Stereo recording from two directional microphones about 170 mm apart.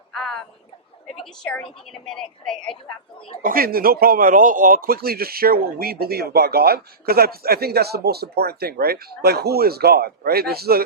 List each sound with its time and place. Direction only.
0.1 s a sound: centre (ahead or behind)
1.1 s a woman's voice: 5° left (ahead or behind)
3.4 s speech: 60° right (ahead or behind)